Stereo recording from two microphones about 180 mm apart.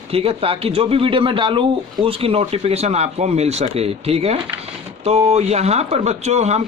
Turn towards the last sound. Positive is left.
turn(degrees=-40)  # may be behind; listen again after turning